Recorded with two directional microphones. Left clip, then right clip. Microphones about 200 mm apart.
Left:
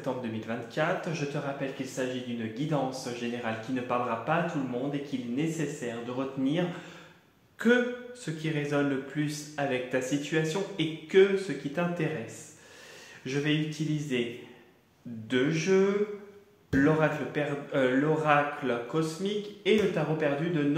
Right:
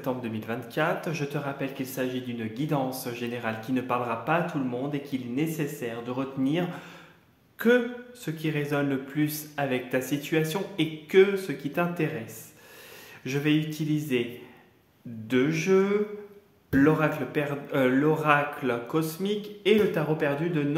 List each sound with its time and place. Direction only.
0.0 s a man's voice: 45° right (ahead or behind)
13.2 s a man's voice: 45° right (ahead or behind)
15.2 s a man's voice: 45° right (ahead or behind)